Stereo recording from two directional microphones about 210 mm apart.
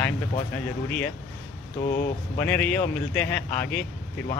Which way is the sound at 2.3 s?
10° left (ahead or behind).